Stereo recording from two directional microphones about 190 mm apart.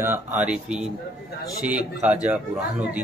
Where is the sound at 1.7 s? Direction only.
10° right (ahead or behind).